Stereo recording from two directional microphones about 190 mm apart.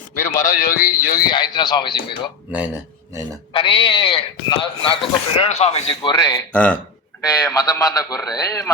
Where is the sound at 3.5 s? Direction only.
25° left (ahead or behind).